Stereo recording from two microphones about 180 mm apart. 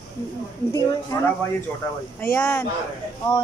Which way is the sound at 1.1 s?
15° left (ahead or behind).